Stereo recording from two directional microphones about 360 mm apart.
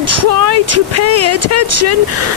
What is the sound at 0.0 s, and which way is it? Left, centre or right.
Speech, right.